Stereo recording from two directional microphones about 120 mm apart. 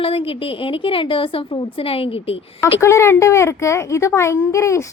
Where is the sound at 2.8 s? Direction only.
25° left (ahead or behind).